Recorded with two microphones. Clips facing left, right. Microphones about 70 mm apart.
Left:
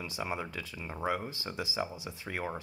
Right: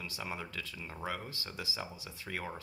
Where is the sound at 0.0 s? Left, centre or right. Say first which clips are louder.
Left 5 dB; centre.